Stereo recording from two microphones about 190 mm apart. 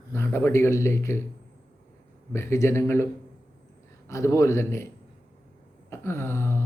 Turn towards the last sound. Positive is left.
turn(degrees=15)  # may be behind; listen again after turning